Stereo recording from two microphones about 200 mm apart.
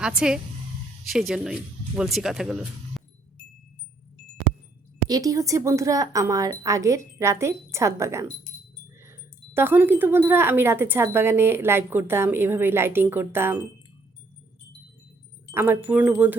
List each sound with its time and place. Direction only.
0.0 s speech: 5° right (ahead or behind)
5.0 s speech: 20° right (ahead or behind)
9.6 s speech: 10° right (ahead or behind)
15.5 s speech: 10° right (ahead or behind)